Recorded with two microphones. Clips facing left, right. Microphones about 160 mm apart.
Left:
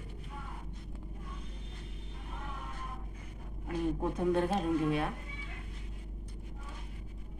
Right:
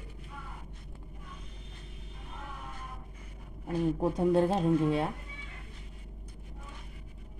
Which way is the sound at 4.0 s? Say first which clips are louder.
Right 5 dB; 30° right (ahead or behind).